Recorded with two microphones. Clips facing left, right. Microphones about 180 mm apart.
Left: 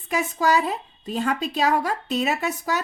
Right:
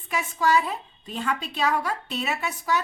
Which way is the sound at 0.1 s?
40° left (ahead or behind).